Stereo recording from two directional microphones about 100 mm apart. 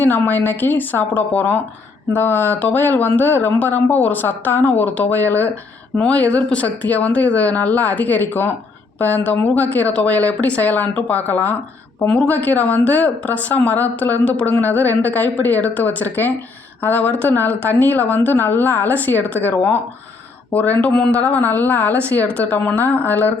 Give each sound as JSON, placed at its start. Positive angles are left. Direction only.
{"t": 0.0, "sound": "speech", "side_deg": 20}